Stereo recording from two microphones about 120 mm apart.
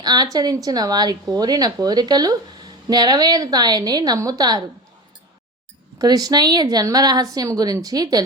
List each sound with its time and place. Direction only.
0.0 s a woman's voice: 35° right (ahead or behind)
6.0 s a woman's voice: 30° right (ahead or behind)